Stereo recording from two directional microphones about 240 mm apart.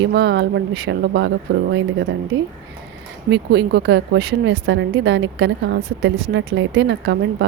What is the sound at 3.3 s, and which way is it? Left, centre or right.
Speech, right.